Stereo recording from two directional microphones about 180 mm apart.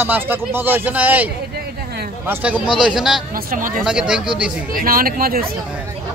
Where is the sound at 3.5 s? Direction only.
50° right (ahead or behind).